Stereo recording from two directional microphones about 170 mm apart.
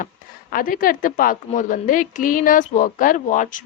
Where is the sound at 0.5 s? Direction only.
55° left (ahead or behind).